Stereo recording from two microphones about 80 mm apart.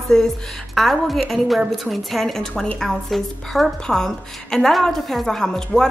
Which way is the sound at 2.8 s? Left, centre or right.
Centre.